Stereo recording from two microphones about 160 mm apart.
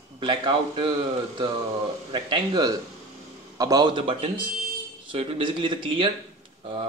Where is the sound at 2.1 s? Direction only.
30° right (ahead or behind).